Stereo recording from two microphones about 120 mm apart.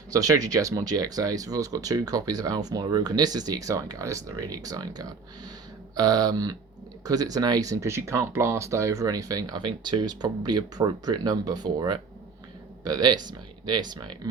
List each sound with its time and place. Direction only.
0.1 s speech: 30° right (ahead or behind)